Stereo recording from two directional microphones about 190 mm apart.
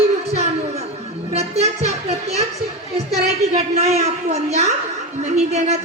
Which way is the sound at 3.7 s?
35° right (ahead or behind).